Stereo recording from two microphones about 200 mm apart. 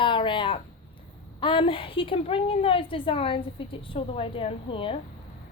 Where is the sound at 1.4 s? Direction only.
25° left (ahead or behind).